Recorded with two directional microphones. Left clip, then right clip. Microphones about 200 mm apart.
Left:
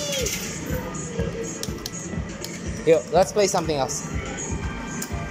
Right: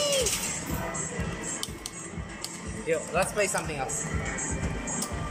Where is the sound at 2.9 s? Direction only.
20° left (ahead or behind).